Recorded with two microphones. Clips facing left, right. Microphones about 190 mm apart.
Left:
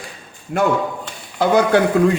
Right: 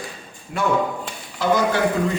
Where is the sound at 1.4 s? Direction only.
60° left (ahead or behind).